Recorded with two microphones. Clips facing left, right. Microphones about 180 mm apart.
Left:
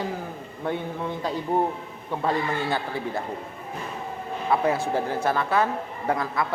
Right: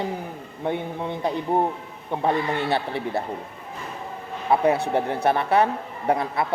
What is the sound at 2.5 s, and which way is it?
Speech, 70° right (ahead or behind).